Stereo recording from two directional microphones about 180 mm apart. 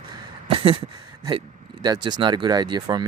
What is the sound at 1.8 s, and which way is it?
Speech, 25° right (ahead or behind).